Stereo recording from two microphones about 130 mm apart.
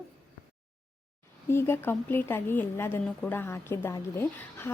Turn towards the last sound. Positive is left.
turn(degrees=20)  # may be behind; listen again after turning